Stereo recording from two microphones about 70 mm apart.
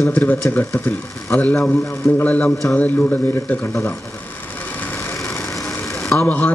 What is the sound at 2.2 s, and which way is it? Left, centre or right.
Speech, left.